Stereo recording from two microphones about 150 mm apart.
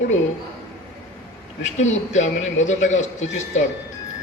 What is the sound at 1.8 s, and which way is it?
A man's voice, 50° left (ahead or behind).